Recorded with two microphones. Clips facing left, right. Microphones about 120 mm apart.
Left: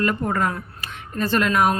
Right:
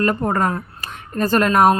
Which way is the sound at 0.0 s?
40° right (ahead or behind).